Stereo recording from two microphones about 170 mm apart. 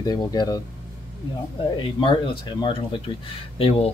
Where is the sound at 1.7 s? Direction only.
30° left (ahead or behind).